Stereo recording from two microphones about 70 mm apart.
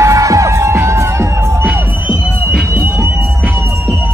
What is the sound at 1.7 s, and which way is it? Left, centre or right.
Music, right.